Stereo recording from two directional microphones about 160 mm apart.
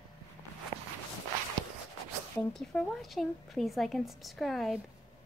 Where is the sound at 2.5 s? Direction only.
5° left (ahead or behind).